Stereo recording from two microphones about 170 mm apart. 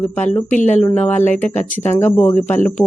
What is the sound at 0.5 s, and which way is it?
Speech, 45° left (ahead or behind).